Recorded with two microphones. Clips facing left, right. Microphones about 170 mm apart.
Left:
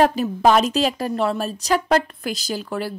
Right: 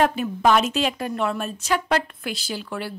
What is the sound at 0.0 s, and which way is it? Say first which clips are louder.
A woman's voice: left 3 dB; 35° left (ahead or behind).